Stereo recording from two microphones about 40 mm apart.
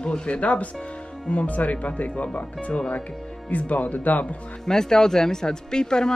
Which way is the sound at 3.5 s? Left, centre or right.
Left.